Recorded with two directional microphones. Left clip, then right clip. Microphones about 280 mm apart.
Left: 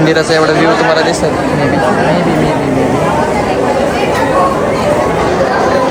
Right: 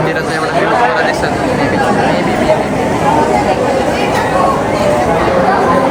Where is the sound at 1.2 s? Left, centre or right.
Centre.